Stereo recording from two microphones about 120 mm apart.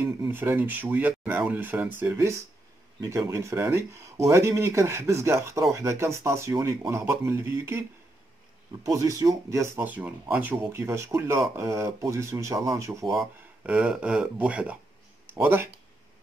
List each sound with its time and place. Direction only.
0.3 s speech: 15° right (ahead or behind)
8.8 s speech: 30° right (ahead or behind)
13.7 s speech: 10° right (ahead or behind)